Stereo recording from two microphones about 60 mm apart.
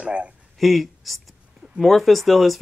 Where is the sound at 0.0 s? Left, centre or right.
Centre.